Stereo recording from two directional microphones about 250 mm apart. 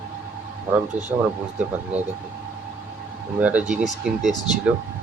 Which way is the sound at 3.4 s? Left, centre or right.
Centre.